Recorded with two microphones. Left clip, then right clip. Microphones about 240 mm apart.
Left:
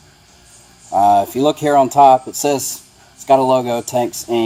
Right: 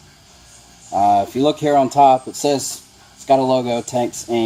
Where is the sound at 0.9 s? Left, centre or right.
Left.